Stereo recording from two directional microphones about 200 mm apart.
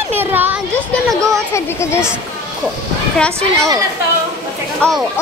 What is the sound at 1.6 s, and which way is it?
Speech, 15° left (ahead or behind).